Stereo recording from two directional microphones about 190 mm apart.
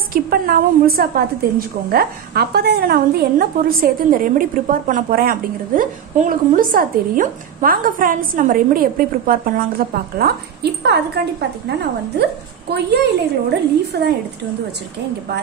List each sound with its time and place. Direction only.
0.1 s a woman's voice: 50° right (ahead or behind)
12.2 s a woman's voice: 60° right (ahead or behind)